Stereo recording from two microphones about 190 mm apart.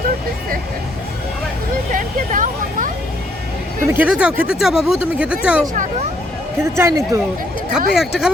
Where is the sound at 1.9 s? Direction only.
45° right (ahead or behind).